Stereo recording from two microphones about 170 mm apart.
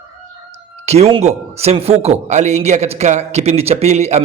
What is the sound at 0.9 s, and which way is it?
A man's voice, 40° right (ahead or behind).